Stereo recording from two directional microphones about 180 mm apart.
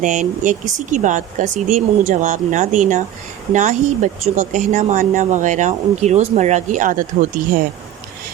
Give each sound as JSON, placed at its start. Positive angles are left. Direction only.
{"t": 0.0, "sound": "speech", "side_deg": -45}